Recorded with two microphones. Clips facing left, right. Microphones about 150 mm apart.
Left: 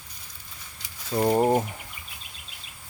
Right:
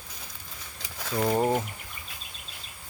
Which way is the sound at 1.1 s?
20° left (ahead or behind).